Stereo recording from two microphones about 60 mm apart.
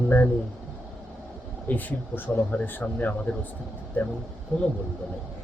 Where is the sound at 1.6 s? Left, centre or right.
Left.